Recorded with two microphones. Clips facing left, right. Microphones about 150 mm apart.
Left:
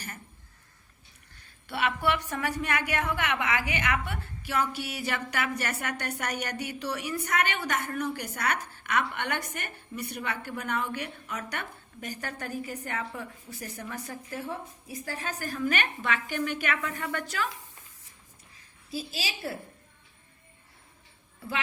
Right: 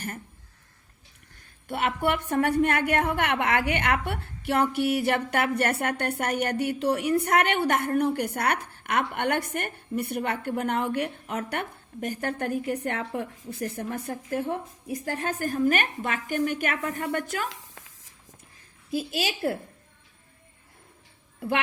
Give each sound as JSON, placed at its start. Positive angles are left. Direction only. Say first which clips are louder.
{"t": 1.6, "sound": "a woman's voice", "louder": "right 2 dB", "side_deg": -50}
{"t": 17.5, "sound": "a sound", "louder": "right 1 dB", "side_deg": -90}
{"t": 18.9, "sound": "a woman's voice", "louder": "right 7 dB", "side_deg": -55}